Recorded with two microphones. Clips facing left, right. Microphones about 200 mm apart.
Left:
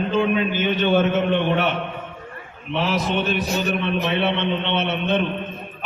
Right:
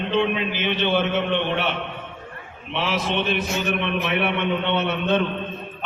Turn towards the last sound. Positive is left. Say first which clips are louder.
# even
turn(degrees=20)  # may be behind; listen again after turning